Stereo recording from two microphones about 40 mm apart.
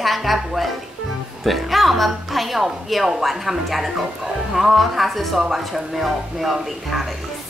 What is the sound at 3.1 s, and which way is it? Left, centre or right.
A woman's voice, centre.